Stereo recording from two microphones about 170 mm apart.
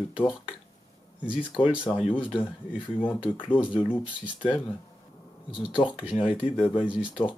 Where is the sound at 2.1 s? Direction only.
30° left (ahead or behind).